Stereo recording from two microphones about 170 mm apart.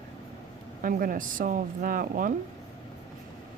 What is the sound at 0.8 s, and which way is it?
Speech, 55° right (ahead or behind).